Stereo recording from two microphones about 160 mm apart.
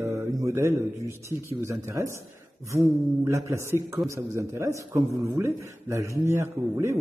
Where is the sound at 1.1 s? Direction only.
15° right (ahead or behind).